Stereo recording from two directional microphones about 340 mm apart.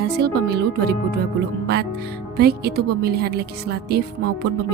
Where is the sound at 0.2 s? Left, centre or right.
Right.